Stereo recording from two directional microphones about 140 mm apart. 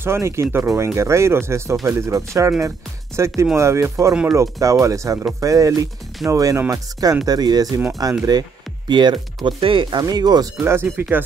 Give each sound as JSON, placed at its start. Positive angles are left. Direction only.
{"t": 0.0, "sound": "speech", "side_deg": -20}
{"t": 4.1, "sound": "speech", "side_deg": -5}
{"t": 4.4, "sound": "speech", "side_deg": -25}
{"t": 8.3, "sound": "music", "side_deg": -30}
{"t": 9.4, "sound": "speech", "side_deg": -35}
{"t": 10.6, "sound": "speech", "side_deg": -15}